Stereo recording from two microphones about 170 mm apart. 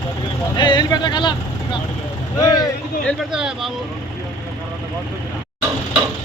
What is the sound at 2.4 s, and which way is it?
Vehicle, 20° left (ahead or behind).